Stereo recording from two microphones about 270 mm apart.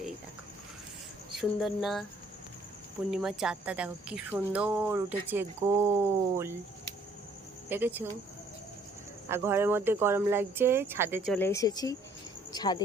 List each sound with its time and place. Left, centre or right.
1.4 s speech: centre
3.1 s speech: centre
7.7 s speech: centre
9.3 s speech: centre
11.3 s speech: centre